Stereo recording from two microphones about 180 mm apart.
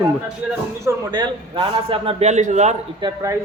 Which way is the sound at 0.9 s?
25° right (ahead or behind).